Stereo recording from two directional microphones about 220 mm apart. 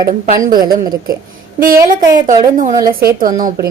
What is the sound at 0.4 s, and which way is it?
Speech, 40° right (ahead or behind).